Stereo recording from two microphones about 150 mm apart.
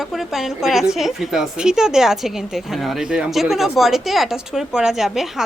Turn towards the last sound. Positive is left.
turn(degrees=0)  # may be behind; listen again after turning